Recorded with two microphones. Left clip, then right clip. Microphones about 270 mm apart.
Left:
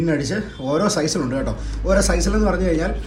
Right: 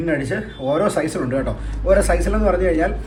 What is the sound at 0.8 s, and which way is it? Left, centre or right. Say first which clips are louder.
A man's voice: right 1 dB; centre.